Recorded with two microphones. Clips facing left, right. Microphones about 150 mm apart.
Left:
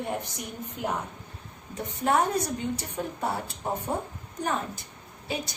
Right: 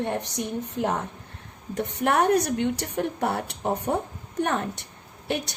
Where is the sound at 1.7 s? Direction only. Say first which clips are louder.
Right 2 dB; 75° right (ahead or behind).